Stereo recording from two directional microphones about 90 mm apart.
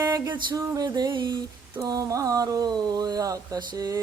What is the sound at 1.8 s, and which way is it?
Speech, 40° right (ahead or behind).